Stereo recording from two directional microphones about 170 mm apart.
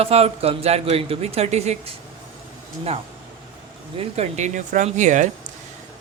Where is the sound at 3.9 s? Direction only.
40° right (ahead or behind).